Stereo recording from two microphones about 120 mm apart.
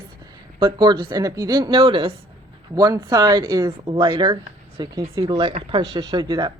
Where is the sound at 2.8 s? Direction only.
35° right (ahead or behind).